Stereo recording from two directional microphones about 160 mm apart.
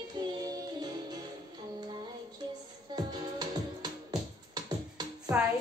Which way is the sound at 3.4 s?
25° right (ahead or behind).